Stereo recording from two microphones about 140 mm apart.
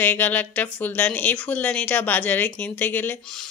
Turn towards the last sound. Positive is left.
turn(degrees=15)  # may be behind; listen again after turning